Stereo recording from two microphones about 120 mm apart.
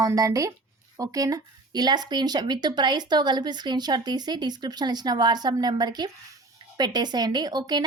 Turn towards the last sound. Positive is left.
turn(degrees=-35)  # may be behind; listen again after turning